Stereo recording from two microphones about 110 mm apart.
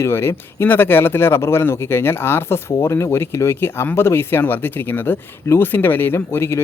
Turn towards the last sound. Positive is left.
turn(degrees=20)  # may be behind; listen again after turning